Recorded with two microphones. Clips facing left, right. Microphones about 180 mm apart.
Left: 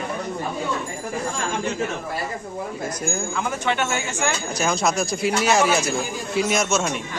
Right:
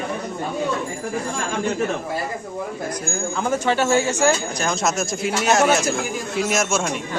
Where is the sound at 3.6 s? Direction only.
35° right (ahead or behind).